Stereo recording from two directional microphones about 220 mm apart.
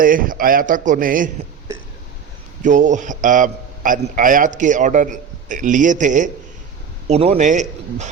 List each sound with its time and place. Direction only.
0.0 s a man's voice: 40° right (ahead or behind)
2.6 s a man's voice: 35° right (ahead or behind)